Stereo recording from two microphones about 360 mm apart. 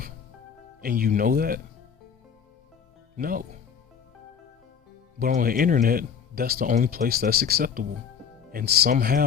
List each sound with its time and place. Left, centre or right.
0.8 s speech: right
3.2 s speech: right
5.2 s speech: right